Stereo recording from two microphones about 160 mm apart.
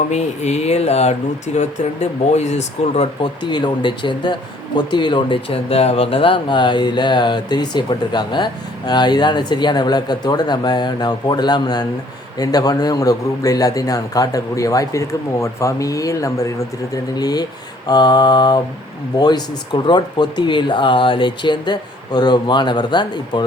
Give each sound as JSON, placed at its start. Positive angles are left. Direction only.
{"t": 0.1, "sound": "speech", "side_deg": 45}
{"t": 3.5, "sound": "a man's voice", "side_deg": 30}